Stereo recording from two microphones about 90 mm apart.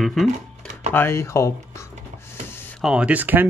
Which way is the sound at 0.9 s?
30° left (ahead or behind).